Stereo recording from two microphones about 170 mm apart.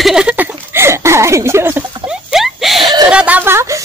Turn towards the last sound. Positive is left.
turn(degrees=-15)  # may be behind; listen again after turning